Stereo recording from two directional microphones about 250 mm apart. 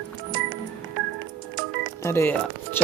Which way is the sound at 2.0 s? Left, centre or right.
Centre.